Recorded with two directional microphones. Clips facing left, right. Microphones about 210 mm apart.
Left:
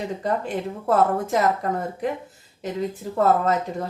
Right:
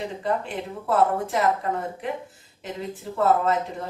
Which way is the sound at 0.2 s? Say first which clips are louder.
Left 1 dB; 40° left (ahead or behind).